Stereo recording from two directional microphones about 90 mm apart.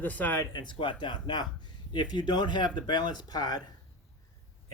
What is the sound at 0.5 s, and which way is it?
Speech, 60° left (ahead or behind).